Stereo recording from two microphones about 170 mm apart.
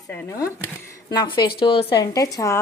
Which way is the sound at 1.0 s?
25° left (ahead or behind).